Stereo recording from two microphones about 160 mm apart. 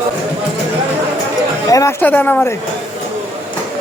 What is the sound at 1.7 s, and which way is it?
Speech, 20° left (ahead or behind).